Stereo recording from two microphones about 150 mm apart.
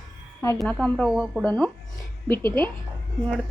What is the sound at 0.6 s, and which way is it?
A woman's voice, 5° left (ahead or behind).